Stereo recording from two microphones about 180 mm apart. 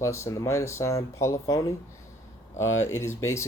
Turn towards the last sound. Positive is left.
turn(degrees=15)  # may be behind; listen again after turning